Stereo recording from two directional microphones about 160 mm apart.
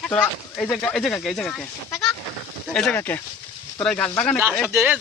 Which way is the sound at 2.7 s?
5° left (ahead or behind).